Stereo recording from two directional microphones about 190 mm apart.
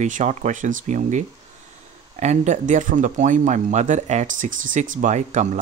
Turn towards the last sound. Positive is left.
turn(degrees=-40)  # may be behind; listen again after turning